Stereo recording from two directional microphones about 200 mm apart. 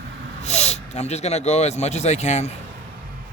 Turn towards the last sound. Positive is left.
turn(degrees=35)  # may be behind; listen again after turning